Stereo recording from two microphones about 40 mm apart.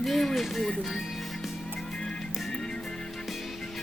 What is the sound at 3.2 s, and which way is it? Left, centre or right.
Music, centre.